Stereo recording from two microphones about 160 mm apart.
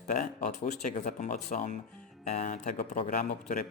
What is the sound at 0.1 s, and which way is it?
Speech, 45° left (ahead or behind).